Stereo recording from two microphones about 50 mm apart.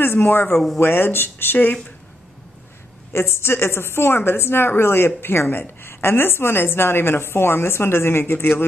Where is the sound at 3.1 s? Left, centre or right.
Left.